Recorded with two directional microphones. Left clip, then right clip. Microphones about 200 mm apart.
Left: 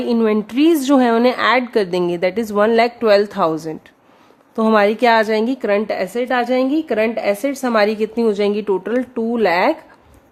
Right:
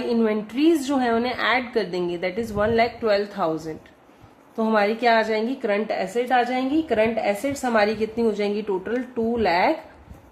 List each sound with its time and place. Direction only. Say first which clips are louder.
0.1 s a woman's voice: left 6 dB; 55° left (ahead or behind)